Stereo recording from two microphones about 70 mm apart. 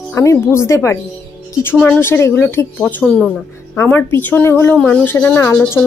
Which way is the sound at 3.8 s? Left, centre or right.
Left.